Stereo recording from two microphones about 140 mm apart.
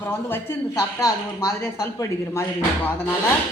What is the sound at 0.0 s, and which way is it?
A woman's voice, 15° left (ahead or behind).